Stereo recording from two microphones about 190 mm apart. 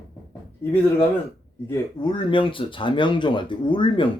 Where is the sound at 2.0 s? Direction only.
25° left (ahead or behind).